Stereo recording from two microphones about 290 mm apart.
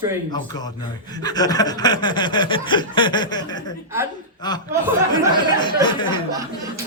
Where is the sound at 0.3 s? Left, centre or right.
Centre.